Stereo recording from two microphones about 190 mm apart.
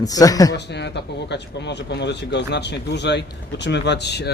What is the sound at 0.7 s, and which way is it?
Speech, 65° left (ahead or behind).